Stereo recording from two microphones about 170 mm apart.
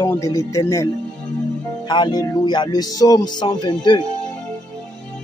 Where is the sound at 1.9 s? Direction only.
25° left (ahead or behind).